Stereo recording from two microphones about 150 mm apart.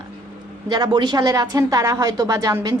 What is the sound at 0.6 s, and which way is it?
A woman's voice, 30° right (ahead or behind).